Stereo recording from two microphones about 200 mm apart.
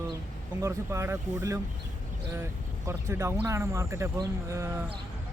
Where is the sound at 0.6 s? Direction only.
15° right (ahead or behind).